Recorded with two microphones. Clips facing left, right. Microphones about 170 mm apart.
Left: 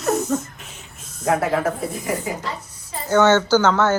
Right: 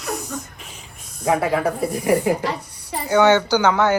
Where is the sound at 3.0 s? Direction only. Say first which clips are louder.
Even; 15° right (ahead or behind).